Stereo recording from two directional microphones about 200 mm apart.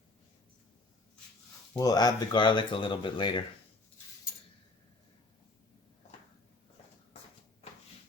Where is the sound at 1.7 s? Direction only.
20° left (ahead or behind).